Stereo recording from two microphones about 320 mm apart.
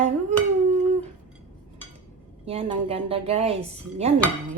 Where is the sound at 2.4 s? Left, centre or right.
Centre.